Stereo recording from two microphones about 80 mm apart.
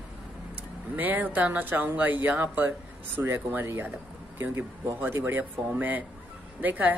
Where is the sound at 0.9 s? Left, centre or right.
Right.